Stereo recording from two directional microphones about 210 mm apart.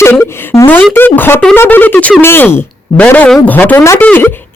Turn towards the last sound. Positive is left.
turn(degrees=10)  # may be behind; listen again after turning